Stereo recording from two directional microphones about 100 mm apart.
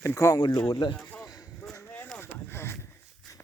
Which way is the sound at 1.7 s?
20° left (ahead or behind).